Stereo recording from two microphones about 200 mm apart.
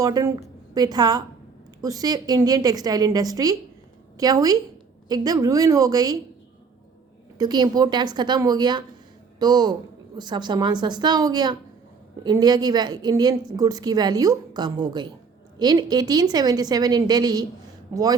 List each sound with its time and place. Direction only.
0.0 s a woman's voice: 15° right (ahead or behind)
7.3 s a woman's voice: 20° right (ahead or behind)